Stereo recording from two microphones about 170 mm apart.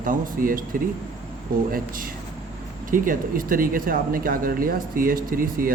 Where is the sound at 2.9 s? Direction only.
55° right (ahead or behind).